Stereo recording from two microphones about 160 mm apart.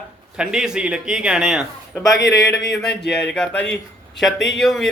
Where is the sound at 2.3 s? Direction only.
20° left (ahead or behind).